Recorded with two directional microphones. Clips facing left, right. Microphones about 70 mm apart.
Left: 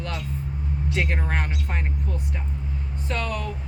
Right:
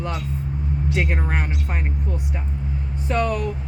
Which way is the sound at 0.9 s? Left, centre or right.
Centre.